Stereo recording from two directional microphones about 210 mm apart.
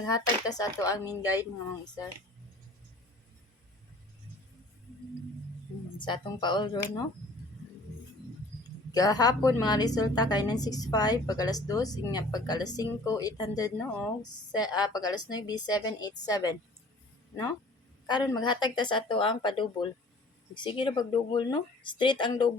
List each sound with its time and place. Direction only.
0.0 s a woman's voice: 15° left (ahead or behind)
6.0 s a woman's voice: 20° left (ahead or behind)
8.9 s a woman's voice: 15° left (ahead or behind)
18.0 s a woman's voice: 20° left (ahead or behind)